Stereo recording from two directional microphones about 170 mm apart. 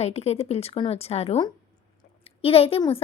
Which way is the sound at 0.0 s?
40° left (ahead or behind).